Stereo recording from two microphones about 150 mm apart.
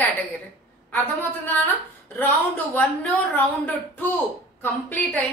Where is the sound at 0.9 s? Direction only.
10° left (ahead or behind).